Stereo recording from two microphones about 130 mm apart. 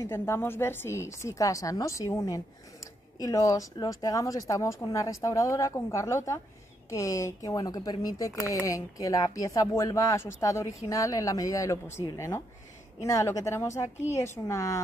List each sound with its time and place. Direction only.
0.0 s a woman's voice: 20° left (ahead or behind)